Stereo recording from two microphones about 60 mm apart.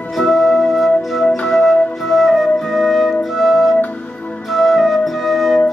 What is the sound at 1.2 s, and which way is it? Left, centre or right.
Flute, centre.